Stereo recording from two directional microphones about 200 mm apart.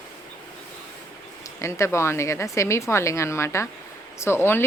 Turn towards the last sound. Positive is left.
turn(degrees=10)  # may be behind; listen again after turning